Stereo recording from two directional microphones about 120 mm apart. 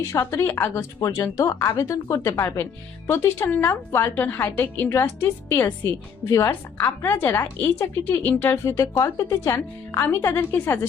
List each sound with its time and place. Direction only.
0.0 s a woman's voice: 25° left (ahead or behind)